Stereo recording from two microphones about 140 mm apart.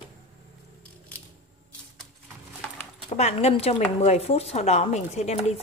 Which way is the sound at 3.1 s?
50° left (ahead or behind).